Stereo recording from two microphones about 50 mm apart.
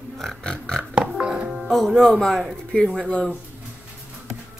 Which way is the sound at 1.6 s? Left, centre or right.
Centre.